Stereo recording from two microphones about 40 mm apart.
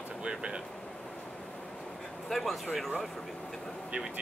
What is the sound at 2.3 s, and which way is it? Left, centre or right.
Speech, centre.